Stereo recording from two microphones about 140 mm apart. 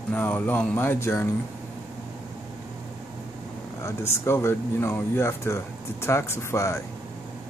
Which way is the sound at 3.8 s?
20° left (ahead or behind).